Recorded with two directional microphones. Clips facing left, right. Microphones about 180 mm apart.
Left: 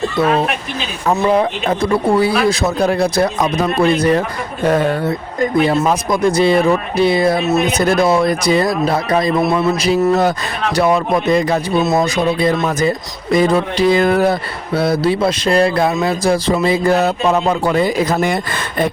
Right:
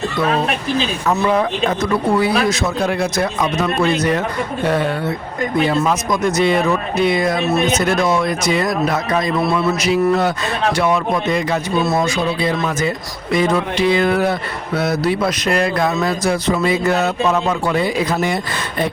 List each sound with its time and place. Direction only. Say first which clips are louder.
1.3 s speech: left 2 dB; 30° left (ahead or behind)
4.6 s speech: left 4 dB; 45° left (ahead or behind)
11.8 s speech: left 2 dB; 20° left (ahead or behind)
12.0 s speech: left 3 dB; 40° left (ahead or behind)